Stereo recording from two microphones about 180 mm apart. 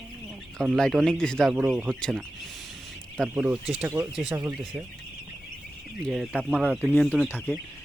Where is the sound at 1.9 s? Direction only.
5° left (ahead or behind).